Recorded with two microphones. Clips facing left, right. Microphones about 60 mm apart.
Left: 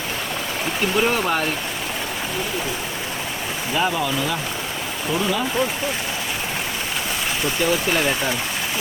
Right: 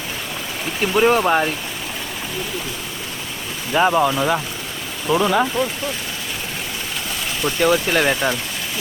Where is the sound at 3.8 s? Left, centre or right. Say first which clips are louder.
Right 6 dB; right.